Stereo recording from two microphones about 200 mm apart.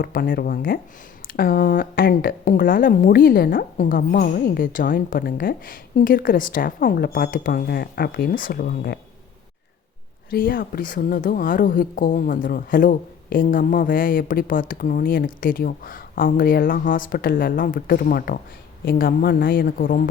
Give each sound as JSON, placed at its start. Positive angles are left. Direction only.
{"t": 0.0, "sound": "speech", "side_deg": 45}
{"t": 10.2, "sound": "speech", "side_deg": 45}